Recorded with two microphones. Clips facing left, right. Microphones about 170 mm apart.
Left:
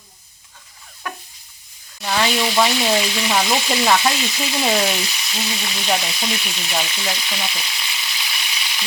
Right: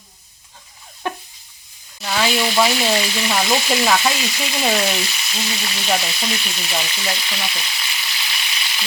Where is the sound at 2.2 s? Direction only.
Centre (ahead or behind).